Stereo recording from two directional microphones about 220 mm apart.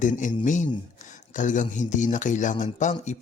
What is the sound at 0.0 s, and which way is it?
Speech, 35° left (ahead or behind).